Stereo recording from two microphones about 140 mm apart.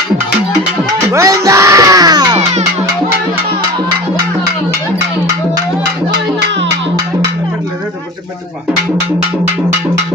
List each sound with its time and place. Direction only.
1.1 s music: 20° right (ahead or behind)